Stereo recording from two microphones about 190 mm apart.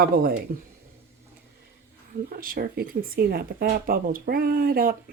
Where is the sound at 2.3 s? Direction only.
50° right (ahead or behind).